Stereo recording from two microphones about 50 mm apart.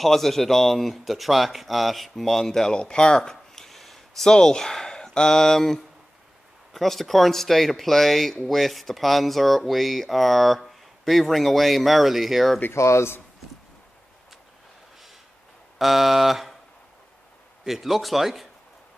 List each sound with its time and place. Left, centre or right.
0.0 s speech: centre
12.7 s speech: left
15.8 s speech: centre
17.6 s speech: centre